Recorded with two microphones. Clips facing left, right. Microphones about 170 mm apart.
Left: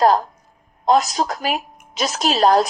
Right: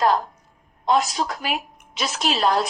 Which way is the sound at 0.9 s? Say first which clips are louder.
Left 4 dB; 40° left (ahead or behind).